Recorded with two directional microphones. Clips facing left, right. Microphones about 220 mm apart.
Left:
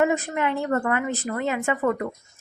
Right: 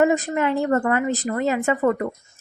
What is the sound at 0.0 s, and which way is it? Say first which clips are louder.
Speech: right 3 dB; 35° right (ahead or behind).